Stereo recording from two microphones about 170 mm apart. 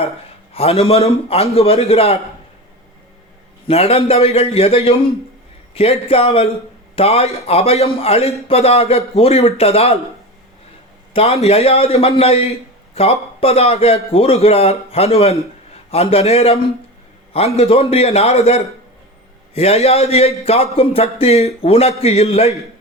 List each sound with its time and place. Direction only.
0.5 s a man's voice: 35° left (ahead or behind)
3.7 s a man's voice: 35° left (ahead or behind)
11.1 s a man's voice: 35° left (ahead or behind)
17.6 s a man's voice: 35° left (ahead or behind)